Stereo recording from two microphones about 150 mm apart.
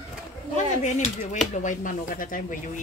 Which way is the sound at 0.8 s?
55° left (ahead or behind).